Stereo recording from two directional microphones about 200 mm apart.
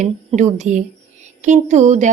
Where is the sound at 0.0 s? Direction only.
35° right (ahead or behind).